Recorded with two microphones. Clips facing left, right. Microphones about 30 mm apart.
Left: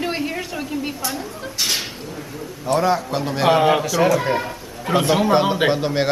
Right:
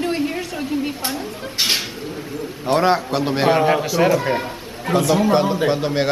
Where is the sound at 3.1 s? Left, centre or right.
Right.